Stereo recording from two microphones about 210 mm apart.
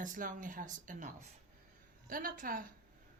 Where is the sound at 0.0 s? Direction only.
40° right (ahead or behind).